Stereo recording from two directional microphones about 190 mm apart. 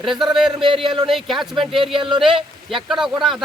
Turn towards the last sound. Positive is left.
turn(degrees=0)  # may be behind; listen again after turning